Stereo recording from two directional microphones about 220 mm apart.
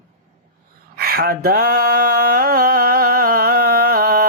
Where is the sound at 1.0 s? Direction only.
45° right (ahead or behind).